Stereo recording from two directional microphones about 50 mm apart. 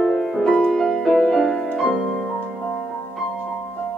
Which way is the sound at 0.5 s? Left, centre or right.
Centre.